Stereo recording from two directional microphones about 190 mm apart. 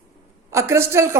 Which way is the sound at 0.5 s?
15° right (ahead or behind).